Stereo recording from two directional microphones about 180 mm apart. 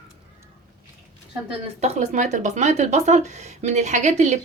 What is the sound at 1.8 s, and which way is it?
Speech, 40° right (ahead or behind).